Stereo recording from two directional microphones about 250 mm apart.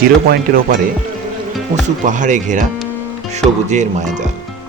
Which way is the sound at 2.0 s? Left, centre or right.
Right.